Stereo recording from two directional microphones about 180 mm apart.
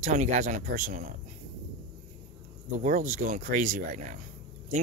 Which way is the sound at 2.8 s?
45° right (ahead or behind).